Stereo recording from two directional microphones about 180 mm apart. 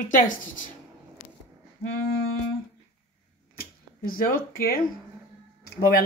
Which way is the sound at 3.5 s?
50° left (ahead or behind).